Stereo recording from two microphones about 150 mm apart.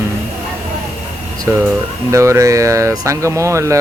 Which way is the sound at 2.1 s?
20° right (ahead or behind).